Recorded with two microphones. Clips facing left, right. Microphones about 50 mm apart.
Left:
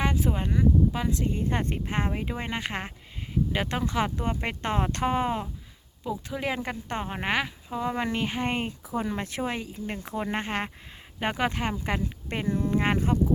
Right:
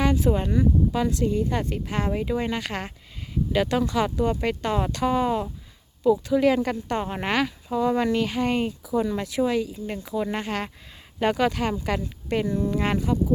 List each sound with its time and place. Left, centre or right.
0.0 s a sound: left
0.3 s speech: centre
1.3 s speech: left
6.1 s speech: centre
7.0 s speech: centre; by 13.1 s left